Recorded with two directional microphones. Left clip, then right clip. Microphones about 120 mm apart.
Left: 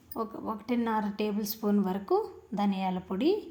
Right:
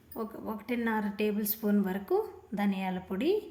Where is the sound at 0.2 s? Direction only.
20° left (ahead or behind).